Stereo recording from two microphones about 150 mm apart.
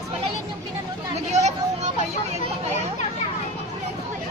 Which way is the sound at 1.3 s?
50° right (ahead or behind).